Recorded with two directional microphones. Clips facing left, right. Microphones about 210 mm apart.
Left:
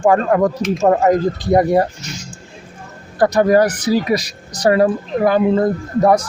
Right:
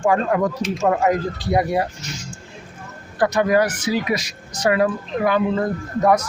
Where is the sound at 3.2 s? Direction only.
35° left (ahead or behind).